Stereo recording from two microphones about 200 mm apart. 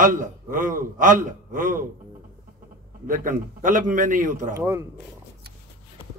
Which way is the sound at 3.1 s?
40° right (ahead or behind).